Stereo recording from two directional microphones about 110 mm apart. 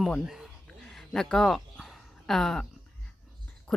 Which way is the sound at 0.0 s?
Centre (ahead or behind).